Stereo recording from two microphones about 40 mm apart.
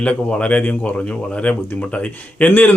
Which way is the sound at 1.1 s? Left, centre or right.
Left.